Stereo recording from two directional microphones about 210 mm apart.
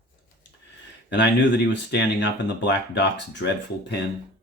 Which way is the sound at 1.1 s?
55° left (ahead or behind).